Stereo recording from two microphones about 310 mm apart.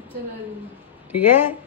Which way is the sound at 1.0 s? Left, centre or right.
Centre.